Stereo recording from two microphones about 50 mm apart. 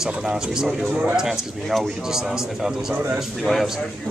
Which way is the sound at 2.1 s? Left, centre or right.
Centre.